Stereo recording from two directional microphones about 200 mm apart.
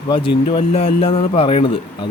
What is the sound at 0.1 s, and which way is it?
Speech, 30° left (ahead or behind).